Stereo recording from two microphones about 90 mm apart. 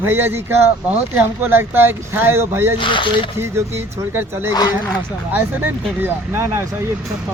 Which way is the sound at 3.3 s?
30° right (ahead or behind).